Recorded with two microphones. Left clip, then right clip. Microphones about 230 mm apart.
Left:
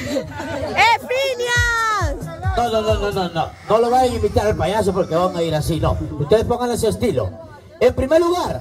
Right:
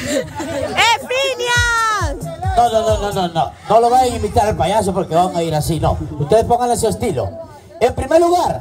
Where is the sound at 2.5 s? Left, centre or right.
Right.